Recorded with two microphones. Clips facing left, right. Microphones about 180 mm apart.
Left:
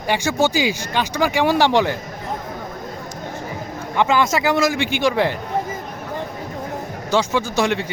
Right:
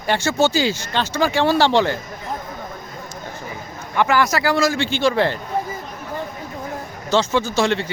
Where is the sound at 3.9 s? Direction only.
20° left (ahead or behind).